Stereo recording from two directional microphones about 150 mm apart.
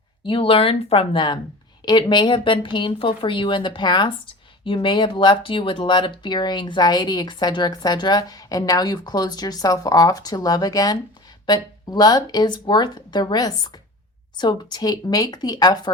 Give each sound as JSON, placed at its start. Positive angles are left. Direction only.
{"t": 0.3, "sound": "speech", "side_deg": 35}